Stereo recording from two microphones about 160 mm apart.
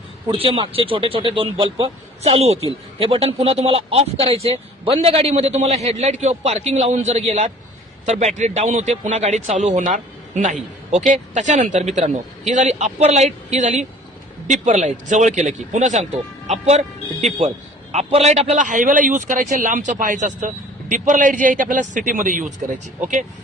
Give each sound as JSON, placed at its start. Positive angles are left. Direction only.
{"t": 0.3, "sound": "a man's voice", "side_deg": -35}